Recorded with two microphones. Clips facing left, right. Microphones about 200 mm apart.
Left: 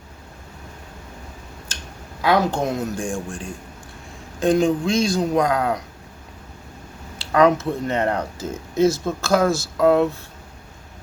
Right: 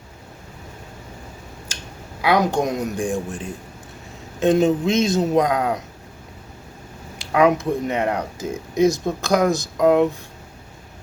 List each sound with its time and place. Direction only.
2.2 s a man's voice: 15° right (ahead or behind)
7.2 s speech: 10° right (ahead or behind)